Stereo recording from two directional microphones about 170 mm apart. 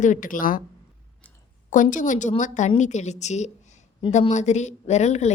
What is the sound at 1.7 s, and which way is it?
A woman's voice, 50° left (ahead or behind).